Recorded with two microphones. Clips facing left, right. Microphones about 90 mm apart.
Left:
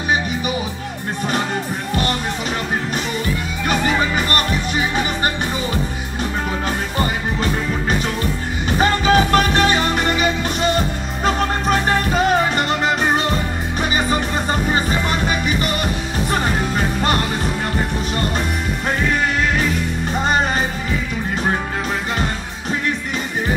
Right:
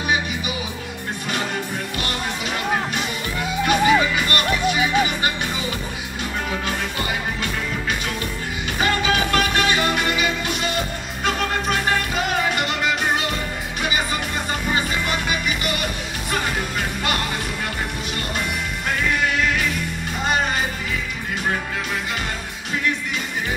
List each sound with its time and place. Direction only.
3.6 s music: 40° left (ahead or behind)
7.0 s music: 35° left (ahead or behind)